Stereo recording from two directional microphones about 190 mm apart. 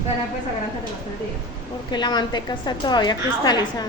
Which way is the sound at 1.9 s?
25° left (ahead or behind).